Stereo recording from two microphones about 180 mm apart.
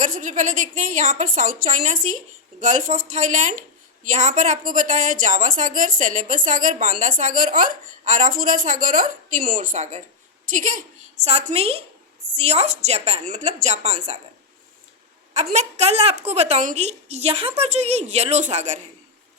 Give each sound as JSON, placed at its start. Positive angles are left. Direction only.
{"t": 0.0, "sound": "a woman's voice", "side_deg": -45}
{"t": 15.5, "sound": "a woman's voice", "side_deg": -35}